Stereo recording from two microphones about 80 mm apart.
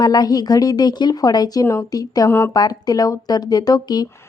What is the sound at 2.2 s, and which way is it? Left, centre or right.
Speech, left.